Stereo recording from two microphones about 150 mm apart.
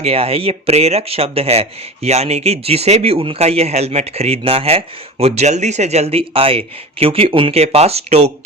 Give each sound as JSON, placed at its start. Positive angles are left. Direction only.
{"t": 0.0, "sound": "speech", "side_deg": -40}